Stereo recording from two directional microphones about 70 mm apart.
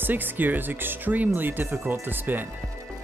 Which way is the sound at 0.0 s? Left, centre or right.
Right.